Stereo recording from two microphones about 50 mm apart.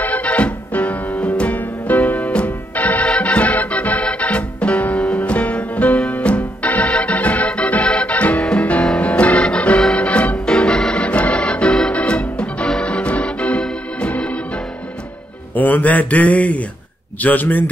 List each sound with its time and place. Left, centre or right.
0.0 s music: left
10.4 s organ: centre
15.5 s mantra: left
17.2 s a man's voice: left